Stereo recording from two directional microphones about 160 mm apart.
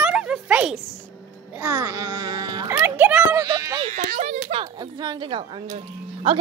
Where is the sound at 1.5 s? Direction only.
15° right (ahead or behind).